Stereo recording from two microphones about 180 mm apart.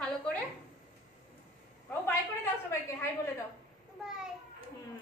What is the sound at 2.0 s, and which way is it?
Speech, 15° left (ahead or behind).